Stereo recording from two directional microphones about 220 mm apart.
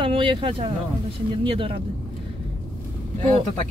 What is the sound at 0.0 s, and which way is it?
Speech, 25° right (ahead or behind).